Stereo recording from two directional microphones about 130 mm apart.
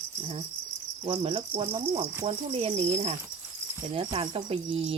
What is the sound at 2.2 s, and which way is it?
Cricket, 45° right (ahead or behind).